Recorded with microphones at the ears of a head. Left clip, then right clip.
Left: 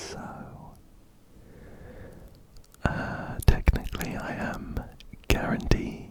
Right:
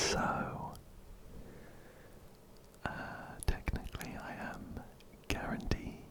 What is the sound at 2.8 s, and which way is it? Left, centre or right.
Whispering, left.